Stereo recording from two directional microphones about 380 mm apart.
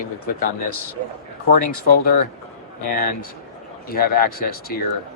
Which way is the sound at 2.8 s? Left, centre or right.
Left.